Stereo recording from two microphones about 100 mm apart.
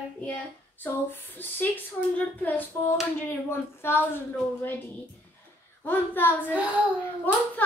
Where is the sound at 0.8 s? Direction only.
20° left (ahead or behind).